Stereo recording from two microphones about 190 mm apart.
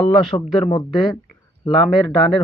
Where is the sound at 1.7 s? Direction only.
Centre (ahead or behind).